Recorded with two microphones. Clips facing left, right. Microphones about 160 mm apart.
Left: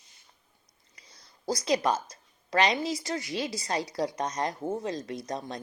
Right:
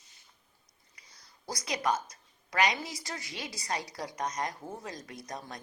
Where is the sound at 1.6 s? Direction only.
30° left (ahead or behind).